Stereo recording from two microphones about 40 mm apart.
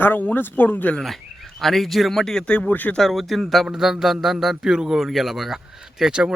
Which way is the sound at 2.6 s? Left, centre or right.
Left.